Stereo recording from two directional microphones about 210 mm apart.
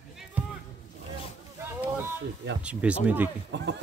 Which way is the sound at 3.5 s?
60° right (ahead or behind).